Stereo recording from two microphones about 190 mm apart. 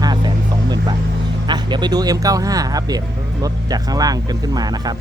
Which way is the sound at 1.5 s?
25° right (ahead or behind).